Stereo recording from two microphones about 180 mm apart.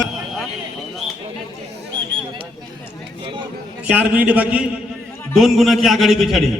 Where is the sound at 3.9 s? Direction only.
10° right (ahead or behind).